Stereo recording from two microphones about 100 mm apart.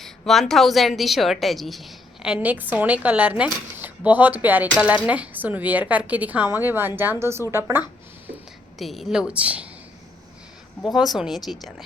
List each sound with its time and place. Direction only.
0.0 s a woman's voice: centre (ahead or behind); by 7.9 s 20° right (ahead or behind)
8.8 s a woman's voice: centre (ahead or behind)
10.8 s speech: centre (ahead or behind)